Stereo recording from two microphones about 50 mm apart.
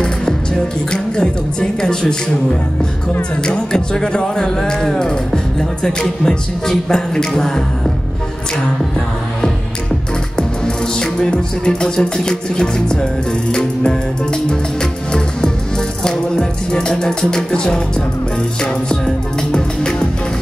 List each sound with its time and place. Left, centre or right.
0.0 s speech: centre
10.3 s music: centre
16.0 s speech: centre
18.6 s music: centre